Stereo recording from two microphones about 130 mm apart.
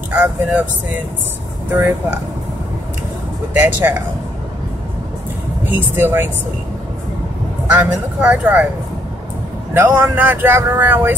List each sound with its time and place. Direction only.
0.1 s speech: 10° right (ahead or behind)
3.5 s speech: 15° right (ahead or behind)
5.7 s speech: 15° right (ahead or behind)
7.7 s speech: 10° right (ahead or behind)
9.8 s speech: 15° right (ahead or behind)